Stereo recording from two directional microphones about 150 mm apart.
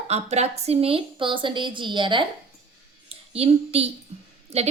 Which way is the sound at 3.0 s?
40° right (ahead or behind).